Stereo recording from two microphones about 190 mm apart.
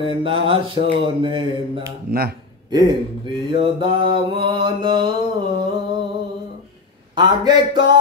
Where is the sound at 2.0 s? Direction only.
55° right (ahead or behind).